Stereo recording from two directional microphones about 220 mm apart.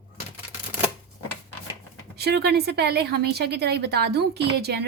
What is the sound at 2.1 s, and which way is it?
A woman's voice, 50° right (ahead or behind).